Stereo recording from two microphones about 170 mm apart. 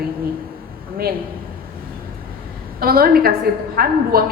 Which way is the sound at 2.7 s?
60° right (ahead or behind).